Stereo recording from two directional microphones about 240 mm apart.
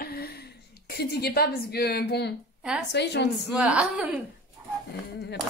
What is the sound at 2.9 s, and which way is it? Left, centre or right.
Speech, left.